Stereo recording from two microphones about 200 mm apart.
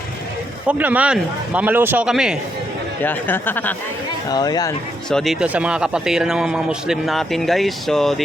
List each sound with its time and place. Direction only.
0.7 s a man's voice: 5° right (ahead or behind)
3.0 s speech: 10° left (ahead or behind)
4.3 s speech: 20° left (ahead or behind)
5.0 s a man's voice: centre (ahead or behind)